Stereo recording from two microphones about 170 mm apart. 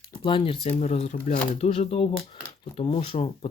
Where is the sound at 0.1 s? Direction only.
30° left (ahead or behind).